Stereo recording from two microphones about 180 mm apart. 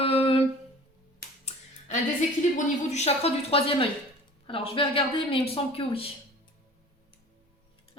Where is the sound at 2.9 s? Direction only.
35° left (ahead or behind).